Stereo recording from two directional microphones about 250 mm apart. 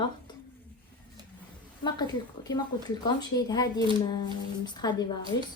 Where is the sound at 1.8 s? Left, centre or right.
Centre.